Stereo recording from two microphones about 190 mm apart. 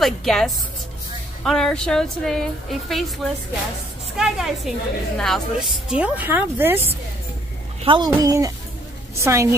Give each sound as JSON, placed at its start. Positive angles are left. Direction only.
{"t": 0.0, "sound": "a woman's voice", "side_deg": 0}
{"t": 4.2, "sound": "a woman's voice", "side_deg": 0}
{"t": 7.8, "sound": "a child's voice", "side_deg": -25}